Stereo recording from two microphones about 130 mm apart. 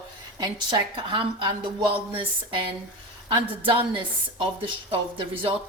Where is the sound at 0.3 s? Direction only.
35° right (ahead or behind).